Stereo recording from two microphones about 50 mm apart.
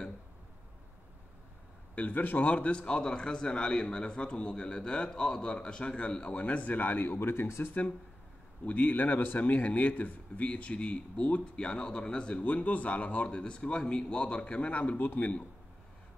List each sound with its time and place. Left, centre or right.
2.0 s a man's voice: left
7.4 s speech: left
8.6 s a man's voice: left